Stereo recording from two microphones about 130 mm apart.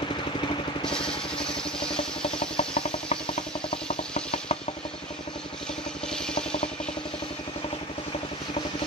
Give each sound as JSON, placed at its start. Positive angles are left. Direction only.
{"t": 0.8, "sound": "vehicle", "side_deg": 5}
{"t": 2.5, "sound": "engine", "side_deg": 40}
{"t": 6.1, "sound": "vehicle", "side_deg": 5}